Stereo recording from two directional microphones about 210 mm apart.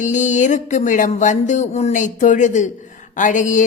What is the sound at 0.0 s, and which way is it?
Speech, 35° left (ahead or behind).